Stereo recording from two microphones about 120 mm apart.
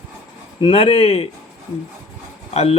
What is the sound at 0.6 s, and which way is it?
Speech, 45° left (ahead or behind).